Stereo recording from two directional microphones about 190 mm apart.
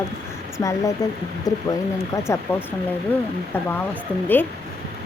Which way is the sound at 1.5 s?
20° left (ahead or behind).